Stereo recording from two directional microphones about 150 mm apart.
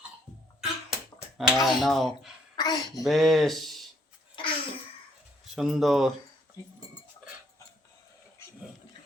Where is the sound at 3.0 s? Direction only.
Centre (ahead or behind).